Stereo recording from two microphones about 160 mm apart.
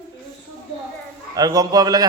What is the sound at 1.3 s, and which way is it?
Speech, 25° right (ahead or behind).